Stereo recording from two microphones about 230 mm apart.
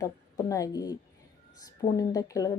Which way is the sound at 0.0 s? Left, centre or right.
Centre.